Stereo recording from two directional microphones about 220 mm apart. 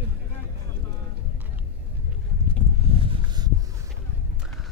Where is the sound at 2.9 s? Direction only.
25° right (ahead or behind).